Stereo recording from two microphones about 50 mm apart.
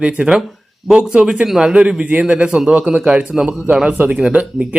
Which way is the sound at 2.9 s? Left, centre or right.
Right.